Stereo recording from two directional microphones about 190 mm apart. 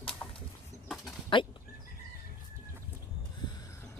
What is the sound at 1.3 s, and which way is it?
Speech, 25° left (ahead or behind).